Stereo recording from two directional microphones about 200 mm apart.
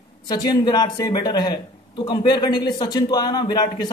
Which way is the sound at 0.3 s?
20° left (ahead or behind).